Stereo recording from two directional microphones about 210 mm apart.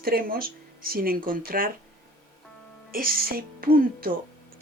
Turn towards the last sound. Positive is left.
turn(degrees=-45)  # may be behind; listen again after turning